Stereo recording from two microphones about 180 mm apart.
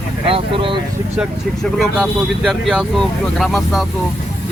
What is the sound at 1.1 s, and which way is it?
Speech, 5° right (ahead or behind).